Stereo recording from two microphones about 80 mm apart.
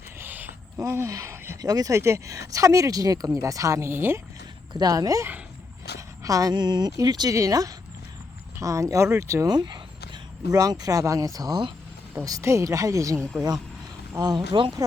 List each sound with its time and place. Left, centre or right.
0.2 s a sound: right
0.8 s speech: right
1.6 s speech: right
2.0 s speech: right
4.7 s speech: right
9.5 s a sound: right
10.5 s speech: right
13.1 s speech: centre
14.2 s speech: right